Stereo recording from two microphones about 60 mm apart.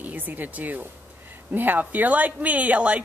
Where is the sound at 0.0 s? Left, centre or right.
Right.